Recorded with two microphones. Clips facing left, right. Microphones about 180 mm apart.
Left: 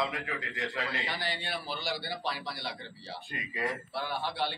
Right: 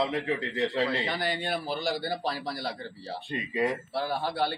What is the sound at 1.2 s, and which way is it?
A man's voice, 45° right (ahead or behind).